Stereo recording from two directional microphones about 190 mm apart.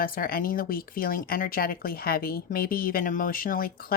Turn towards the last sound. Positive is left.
turn(degrees=50)  # may be behind; listen again after turning